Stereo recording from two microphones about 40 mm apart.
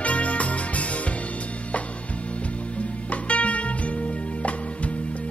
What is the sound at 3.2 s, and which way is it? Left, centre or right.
Music, left.